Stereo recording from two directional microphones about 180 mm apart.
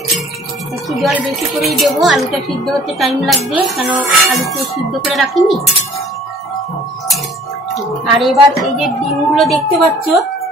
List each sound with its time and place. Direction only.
0.8 s a woman's voice: centre (ahead or behind)
7.7 s a woman's voice: centre (ahead or behind)